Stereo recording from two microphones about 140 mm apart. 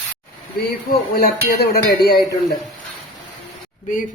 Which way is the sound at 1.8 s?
90° left.